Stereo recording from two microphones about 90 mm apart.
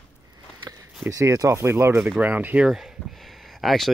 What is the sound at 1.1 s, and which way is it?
Speech, 40° right (ahead or behind).